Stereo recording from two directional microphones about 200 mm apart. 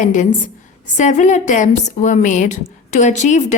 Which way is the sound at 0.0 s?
40° left (ahead or behind).